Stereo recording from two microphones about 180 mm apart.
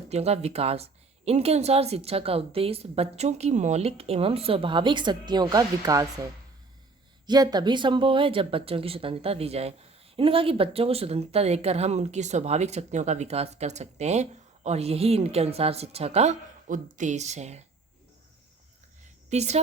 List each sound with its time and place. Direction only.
0.1 s speech: 35° right (ahead or behind); by 6.1 s 20° right (ahead or behind)
7.3 s speech: 20° right (ahead or behind); by 17.6 s 40° right (ahead or behind)
19.0 s a sound: 40° right (ahead or behind)